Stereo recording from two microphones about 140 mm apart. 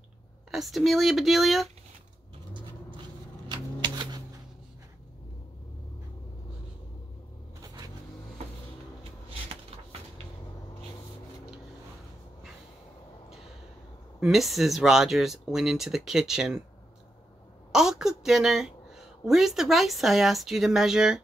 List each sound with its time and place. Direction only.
0.5 s speech: centre (ahead or behind)
3.4 s shuffling cards: 30° right (ahead or behind)
7.6 s vehicle: 25° right (ahead or behind)
14.2 s speech: centre (ahead or behind)
17.7 s a woman's voice: 5° right (ahead or behind)